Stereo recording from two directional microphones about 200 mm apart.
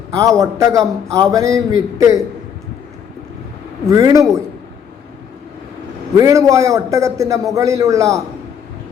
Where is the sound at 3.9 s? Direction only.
15° right (ahead or behind).